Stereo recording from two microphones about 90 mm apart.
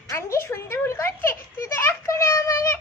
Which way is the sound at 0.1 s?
30° left (ahead or behind).